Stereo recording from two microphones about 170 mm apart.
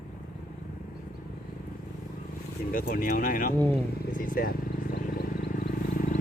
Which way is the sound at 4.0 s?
55° left (ahead or behind).